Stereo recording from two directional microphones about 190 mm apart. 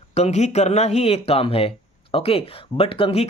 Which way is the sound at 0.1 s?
35° left (ahead or behind).